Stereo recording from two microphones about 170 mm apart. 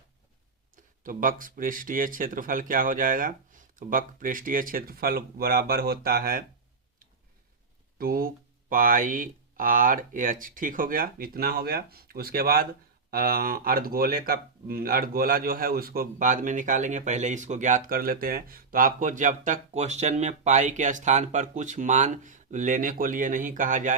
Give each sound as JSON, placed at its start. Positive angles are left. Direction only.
{"t": 1.0, "sound": "speech", "side_deg": -55}
{"t": 7.9, "sound": "speech", "side_deg": -60}